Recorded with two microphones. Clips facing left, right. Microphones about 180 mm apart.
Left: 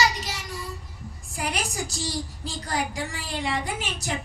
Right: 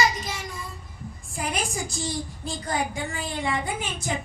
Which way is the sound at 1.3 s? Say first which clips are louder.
Right 1 dB; 75° left (ahead or behind).